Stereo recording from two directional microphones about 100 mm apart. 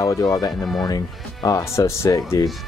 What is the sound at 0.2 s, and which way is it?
Speech, 40° left (ahead or behind).